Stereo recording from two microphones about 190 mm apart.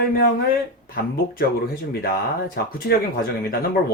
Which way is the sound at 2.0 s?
50° left (ahead or behind).